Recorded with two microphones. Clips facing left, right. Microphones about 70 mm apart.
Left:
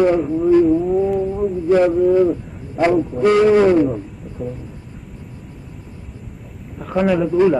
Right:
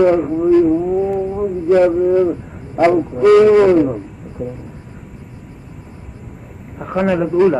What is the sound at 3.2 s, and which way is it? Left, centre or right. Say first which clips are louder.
Speech: right 5 dB; right.